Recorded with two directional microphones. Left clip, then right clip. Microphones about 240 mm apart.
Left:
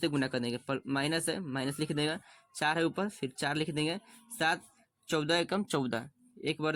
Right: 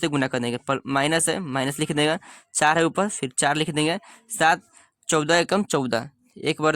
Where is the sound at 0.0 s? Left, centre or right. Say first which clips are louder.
Right 8 dB; right.